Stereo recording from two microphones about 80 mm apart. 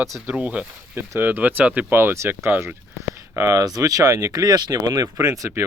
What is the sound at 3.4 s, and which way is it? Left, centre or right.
Speech, right.